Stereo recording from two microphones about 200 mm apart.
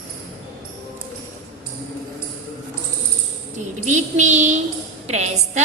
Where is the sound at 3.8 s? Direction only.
35° right (ahead or behind).